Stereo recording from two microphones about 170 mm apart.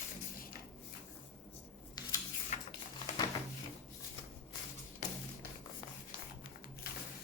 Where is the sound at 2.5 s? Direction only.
45° left (ahead or behind).